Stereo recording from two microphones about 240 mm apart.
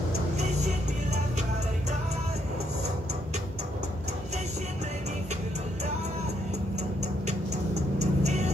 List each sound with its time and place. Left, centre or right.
0.4 s music: right
7.2 s music: right